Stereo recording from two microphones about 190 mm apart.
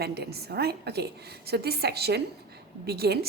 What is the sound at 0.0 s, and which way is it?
A woman's voice, 55° right (ahead or behind).